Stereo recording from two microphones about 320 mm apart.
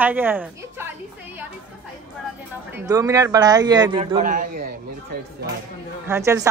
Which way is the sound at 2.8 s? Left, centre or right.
Centre.